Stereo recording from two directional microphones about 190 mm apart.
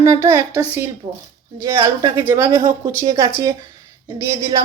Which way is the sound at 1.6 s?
15° right (ahead or behind).